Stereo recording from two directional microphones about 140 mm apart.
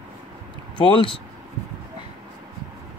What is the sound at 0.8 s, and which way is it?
Speech, 40° left (ahead or behind).